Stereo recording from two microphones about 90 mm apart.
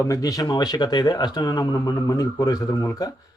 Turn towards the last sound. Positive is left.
turn(degrees=40)  # may be behind; listen again after turning